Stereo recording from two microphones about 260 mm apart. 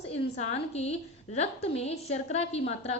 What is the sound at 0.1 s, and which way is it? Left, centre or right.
A woman's voice, left.